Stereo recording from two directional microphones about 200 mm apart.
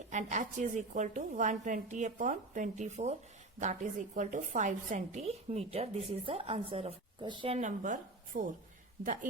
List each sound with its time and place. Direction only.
0.1 s a woman's voice: 40° right (ahead or behind)